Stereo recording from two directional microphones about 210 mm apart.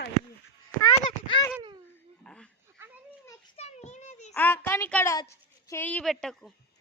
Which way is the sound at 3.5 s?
30° left (ahead or behind).